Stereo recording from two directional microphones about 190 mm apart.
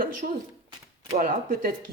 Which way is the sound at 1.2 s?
50° right (ahead or behind).